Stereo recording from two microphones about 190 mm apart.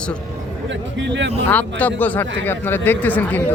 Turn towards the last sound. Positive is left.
turn(degrees=10)  # may be behind; listen again after turning